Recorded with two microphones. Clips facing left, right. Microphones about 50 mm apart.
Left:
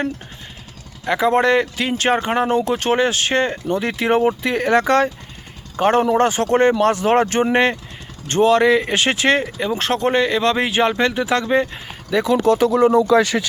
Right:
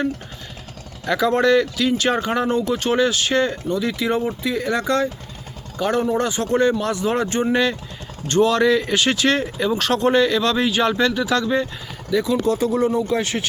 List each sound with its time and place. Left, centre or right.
1.0 s speech: left
5.7 s speech: left
8.3 s speech: left
12.1 s speech: left